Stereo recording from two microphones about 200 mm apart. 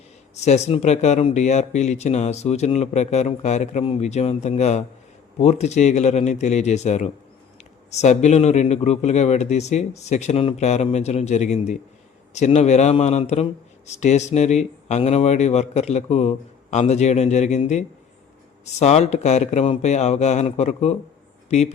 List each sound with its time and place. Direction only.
0.3 s speech: 35° left (ahead or behind)